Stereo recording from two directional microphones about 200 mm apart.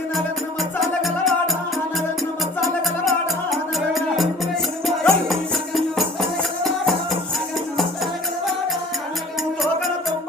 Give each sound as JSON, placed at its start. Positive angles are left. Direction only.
{"t": 0.8, "sound": "music", "side_deg": 0}
{"t": 3.1, "sound": "music", "side_deg": 0}